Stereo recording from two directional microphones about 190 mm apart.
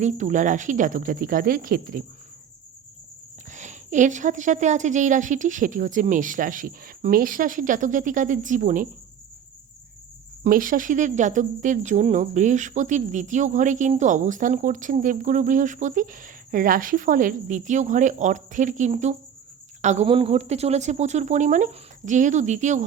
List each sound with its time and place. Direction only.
0.0 s speech: 40° right (ahead or behind)
3.5 s speech: 40° right (ahead or behind)
10.4 s speech: 45° right (ahead or behind)